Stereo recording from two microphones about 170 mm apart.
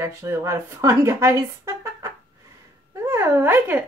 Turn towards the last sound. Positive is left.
turn(degrees=-10)  # may be behind; listen again after turning